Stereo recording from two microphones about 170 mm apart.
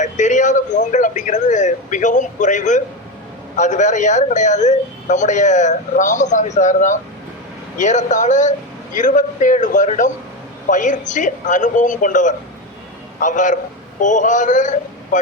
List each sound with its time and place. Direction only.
0.0 s a man's voice: 45° left (ahead or behind)